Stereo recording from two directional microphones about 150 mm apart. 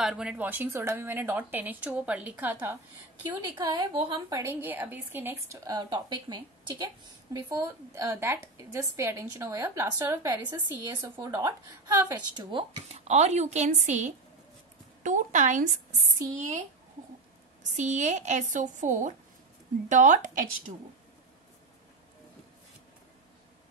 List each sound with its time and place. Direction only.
0.0 s a woman's voice: 5° right (ahead or behind)
3.4 s a woman's voice: 25° right (ahead or behind)
4.4 s a woman's voice: 15° right (ahead or behind)
12.1 s speech: 30° right (ahead or behind)
13.0 s a woman's voice: 50° right (ahead or behind)
17.6 s speech: 55° right (ahead or behind)